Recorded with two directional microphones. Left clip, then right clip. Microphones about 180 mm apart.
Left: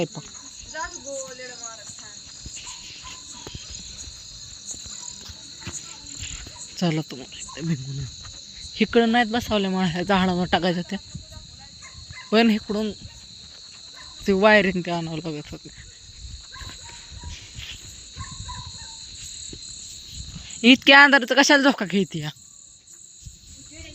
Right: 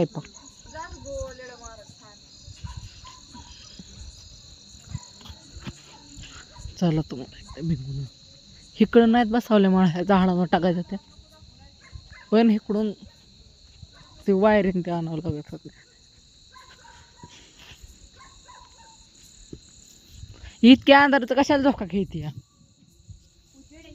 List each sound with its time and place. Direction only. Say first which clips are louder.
6.7 s speech: even; 20° right (ahead or behind)
7.5 s speech: left 1 dB; 10° right (ahead or behind)
8.7 s speech: right 1 dB; 30° right (ahead or behind)
9.5 s speech: right 4 dB; 50° right (ahead or behind)
9.8 s speech: even; 25° right (ahead or behind)
10.8 s speech: left 2 dB; 10° right (ahead or behind)
12.3 s speech: left 1 dB; 20° right (ahead or behind)
14.3 s speech: left 3 dB; 15° right (ahead or behind)
20.5 s speech: left 1 dB; 25° right (ahead or behind); by 22.4 s centre (ahead or behind)